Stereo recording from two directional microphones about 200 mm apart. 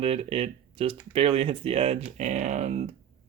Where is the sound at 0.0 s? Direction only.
30° right (ahead or behind).